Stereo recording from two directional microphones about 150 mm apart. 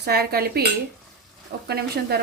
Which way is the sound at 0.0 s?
90° right.